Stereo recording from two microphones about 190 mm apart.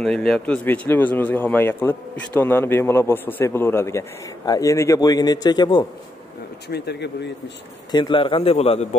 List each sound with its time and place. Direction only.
0.0 s a man's voice: 5° left (ahead or behind); by 5.9 s 20° left (ahead or behind)
6.7 s speech: 60° left (ahead or behind)
7.9 s a man's voice: 25° left (ahead or behind)